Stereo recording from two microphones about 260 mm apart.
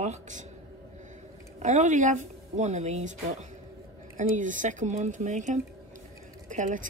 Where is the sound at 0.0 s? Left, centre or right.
Right.